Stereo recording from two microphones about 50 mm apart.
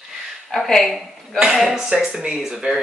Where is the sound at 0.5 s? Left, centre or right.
Centre.